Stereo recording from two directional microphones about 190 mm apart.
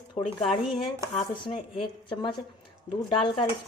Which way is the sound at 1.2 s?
25° left (ahead or behind).